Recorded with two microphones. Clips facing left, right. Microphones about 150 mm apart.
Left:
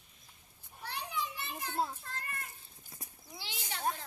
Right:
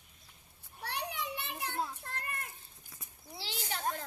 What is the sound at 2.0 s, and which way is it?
Child singing, 60° right (ahead or behind).